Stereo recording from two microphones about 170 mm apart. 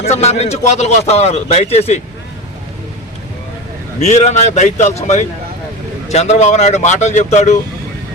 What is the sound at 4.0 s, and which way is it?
A man's voice, 40° left (ahead or behind).